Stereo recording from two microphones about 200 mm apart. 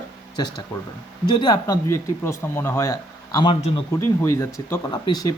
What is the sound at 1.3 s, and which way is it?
Speech, 20° left (ahead or behind).